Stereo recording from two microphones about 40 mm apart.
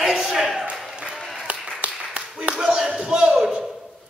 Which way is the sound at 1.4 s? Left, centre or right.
Right.